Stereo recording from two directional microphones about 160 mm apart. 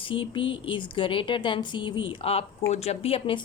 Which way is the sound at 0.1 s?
30° left (ahead or behind).